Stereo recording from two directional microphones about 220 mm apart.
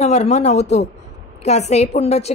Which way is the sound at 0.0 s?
30° left (ahead or behind).